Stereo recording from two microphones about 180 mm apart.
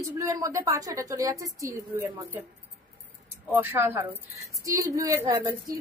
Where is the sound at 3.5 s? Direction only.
15° right (ahead or behind).